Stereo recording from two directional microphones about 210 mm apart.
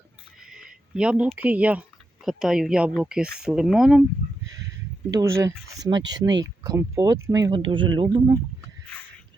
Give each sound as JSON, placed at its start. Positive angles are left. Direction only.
{"t": 0.3, "sound": "a sound", "side_deg": -5}
{"t": 2.2, "sound": "speech", "side_deg": 0}
{"t": 5.1, "sound": "speech", "side_deg": -15}